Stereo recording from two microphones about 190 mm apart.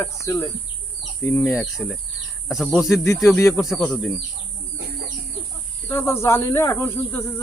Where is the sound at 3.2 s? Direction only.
15° left (ahead or behind).